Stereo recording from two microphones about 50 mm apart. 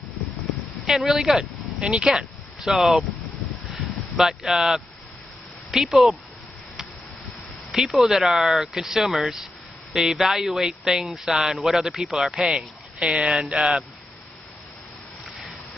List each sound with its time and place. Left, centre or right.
0.8 s speech: centre
1.4 s speech: centre
2.6 s speech: centre
3.7 s a sound: centre
5.7 s speech: centre
7.7 s speech: centre